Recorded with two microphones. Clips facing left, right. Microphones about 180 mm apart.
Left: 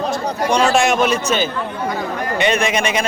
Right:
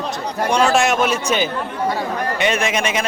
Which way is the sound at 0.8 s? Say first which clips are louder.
Left 2 dB; 5° right (ahead or behind).